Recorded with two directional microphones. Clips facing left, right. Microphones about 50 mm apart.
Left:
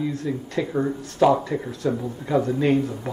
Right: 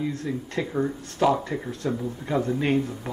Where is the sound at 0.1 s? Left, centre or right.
Right.